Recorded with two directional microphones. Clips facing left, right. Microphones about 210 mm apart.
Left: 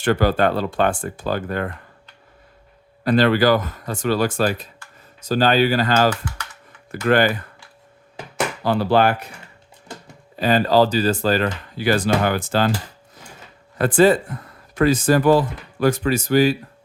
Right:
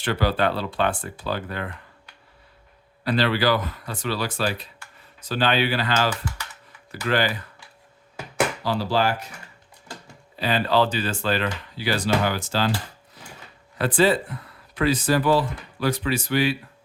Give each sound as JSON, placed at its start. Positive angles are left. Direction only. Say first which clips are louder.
{"t": 0.0, "sound": "speech", "louder": "left 5 dB", "side_deg": 50}
{"t": 3.0, "sound": "speech", "louder": "left 6 dB", "side_deg": 50}
{"t": 8.6, "sound": "speech", "louder": "left 9 dB", "side_deg": 55}
{"t": 10.3, "sound": "speech", "louder": "left 5 dB", "side_deg": 45}
{"t": 13.7, "sound": "speech", "louder": "left 5 dB", "side_deg": 50}